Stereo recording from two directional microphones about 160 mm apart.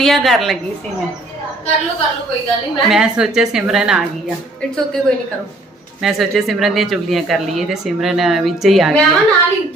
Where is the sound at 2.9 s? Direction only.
5° right (ahead or behind).